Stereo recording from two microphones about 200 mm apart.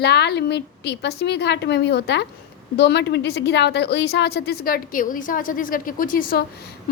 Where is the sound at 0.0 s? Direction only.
55° left (ahead or behind).